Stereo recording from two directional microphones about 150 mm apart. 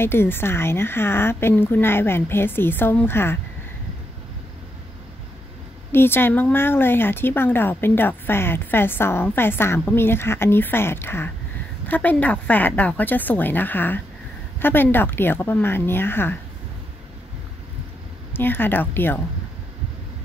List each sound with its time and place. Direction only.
0.0 s speech: 15° left (ahead or behind)
5.9 s speech: 15° left (ahead or behind)
18.3 s speech: 15° left (ahead or behind)